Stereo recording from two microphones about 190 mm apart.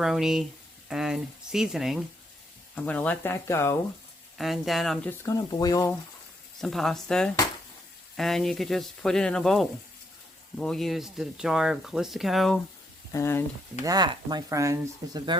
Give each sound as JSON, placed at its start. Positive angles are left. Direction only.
{"t": 0.0, "sound": "speech", "side_deg": 0}
{"t": 4.4, "sound": "speech", "side_deg": 0}
{"t": 5.2, "sound": "speech", "side_deg": 20}
{"t": 6.6, "sound": "speech", "side_deg": 0}
{"t": 13.1, "sound": "speech", "side_deg": 15}
{"t": 13.8, "sound": "speech", "side_deg": -20}